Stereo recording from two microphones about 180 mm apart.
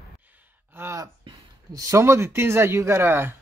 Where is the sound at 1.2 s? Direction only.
20° right (ahead or behind).